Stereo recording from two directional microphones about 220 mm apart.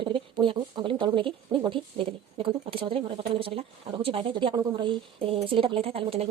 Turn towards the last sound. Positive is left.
turn(degrees=-25)  # may be behind; listen again after turning